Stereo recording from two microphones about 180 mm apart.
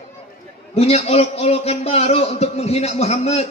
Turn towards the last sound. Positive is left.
turn(degrees=35)  # may be behind; listen again after turning